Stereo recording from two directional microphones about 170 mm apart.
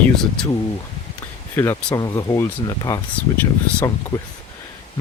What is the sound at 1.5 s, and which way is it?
Speech, 15° left (ahead or behind).